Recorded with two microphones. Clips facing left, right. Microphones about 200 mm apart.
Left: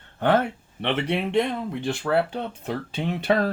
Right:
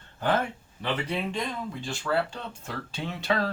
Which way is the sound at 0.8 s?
70° left (ahead or behind).